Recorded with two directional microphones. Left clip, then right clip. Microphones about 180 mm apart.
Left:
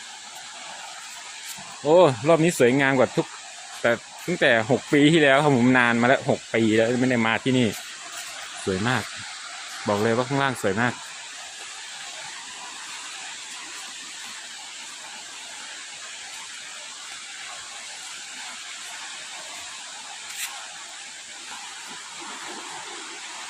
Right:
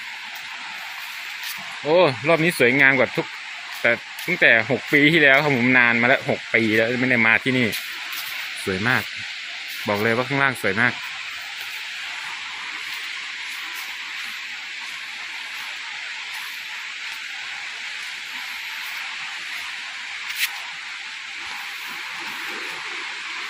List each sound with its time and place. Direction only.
1.8 s speech: 15° left (ahead or behind)
8.8 s speech: centre (ahead or behind)